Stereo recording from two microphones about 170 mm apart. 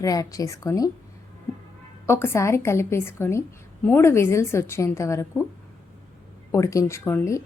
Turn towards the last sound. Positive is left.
turn(degrees=15)  # may be behind; listen again after turning